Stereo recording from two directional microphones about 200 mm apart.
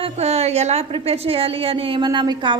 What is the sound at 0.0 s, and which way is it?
A woman's voice, 30° right (ahead or behind).